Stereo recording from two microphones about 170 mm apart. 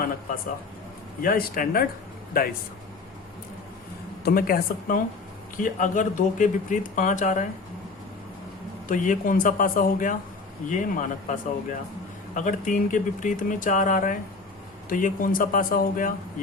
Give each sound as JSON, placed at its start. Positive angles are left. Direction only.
{"t": 1.2, "sound": "speech", "side_deg": 60}
{"t": 4.2, "sound": "speech", "side_deg": 60}
{"t": 8.9, "sound": "speech", "side_deg": 50}